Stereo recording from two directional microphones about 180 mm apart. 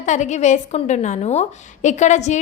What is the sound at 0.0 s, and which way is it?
A woman's voice, 40° left (ahead or behind).